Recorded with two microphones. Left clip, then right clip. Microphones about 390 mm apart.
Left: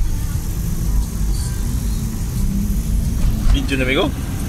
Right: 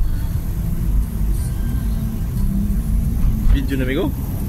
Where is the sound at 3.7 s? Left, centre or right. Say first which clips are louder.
Left 4 dB; left.